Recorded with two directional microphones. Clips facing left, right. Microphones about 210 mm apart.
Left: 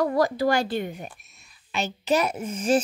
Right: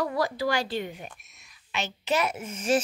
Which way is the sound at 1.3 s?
35° left (ahead or behind).